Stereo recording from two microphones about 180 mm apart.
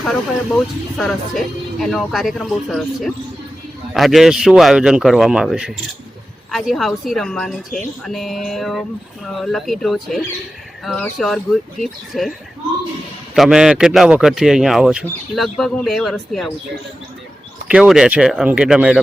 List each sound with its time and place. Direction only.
0.0 s speech: centre (ahead or behind)
13.3 s speech: centre (ahead or behind)
17.7 s speech: 5° right (ahead or behind)